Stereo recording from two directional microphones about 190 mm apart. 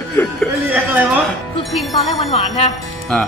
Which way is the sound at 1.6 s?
Centre (ahead or behind).